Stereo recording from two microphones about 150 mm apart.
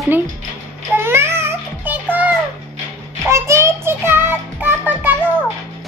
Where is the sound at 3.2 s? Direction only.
20° right (ahead or behind).